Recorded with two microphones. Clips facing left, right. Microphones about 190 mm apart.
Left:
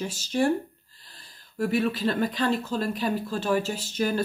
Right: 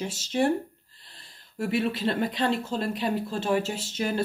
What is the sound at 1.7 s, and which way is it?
Speech, 25° right (ahead or behind).